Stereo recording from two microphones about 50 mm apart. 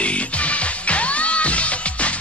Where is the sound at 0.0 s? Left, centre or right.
Left.